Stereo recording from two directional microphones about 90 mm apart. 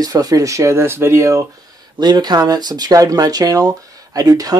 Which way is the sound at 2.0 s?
50° right (ahead or behind).